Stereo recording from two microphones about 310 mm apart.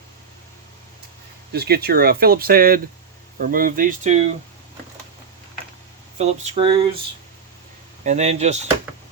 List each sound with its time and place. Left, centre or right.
1.5 s speech: right
6.1 s speech: right
8.0 s speech: right